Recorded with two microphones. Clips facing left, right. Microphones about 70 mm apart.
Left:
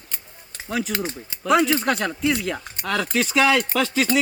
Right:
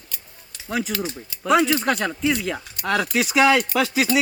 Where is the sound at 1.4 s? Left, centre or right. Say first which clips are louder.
Even; centre.